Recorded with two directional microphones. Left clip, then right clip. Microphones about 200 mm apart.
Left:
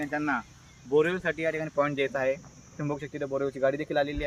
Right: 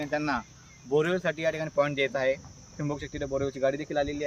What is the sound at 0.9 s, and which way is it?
Speech, 55° right (ahead or behind).